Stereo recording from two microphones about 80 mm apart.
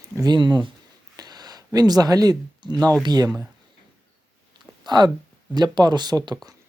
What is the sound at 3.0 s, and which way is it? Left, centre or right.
Speech, right.